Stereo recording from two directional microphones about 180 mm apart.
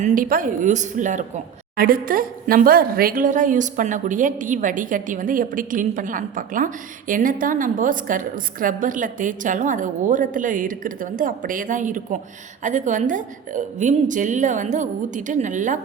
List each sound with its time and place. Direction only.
0.0 s a woman's voice: 50° right (ahead or behind)
1.7 s a woman's voice: 55° right (ahead or behind)